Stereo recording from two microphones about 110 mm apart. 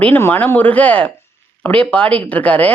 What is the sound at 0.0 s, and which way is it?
Speech, 20° left (ahead or behind).